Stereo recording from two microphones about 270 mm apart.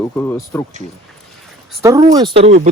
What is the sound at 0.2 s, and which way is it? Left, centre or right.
Speech, centre.